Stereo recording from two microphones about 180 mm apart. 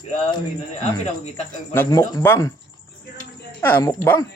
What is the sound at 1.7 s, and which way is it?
Speech, 15° left (ahead or behind).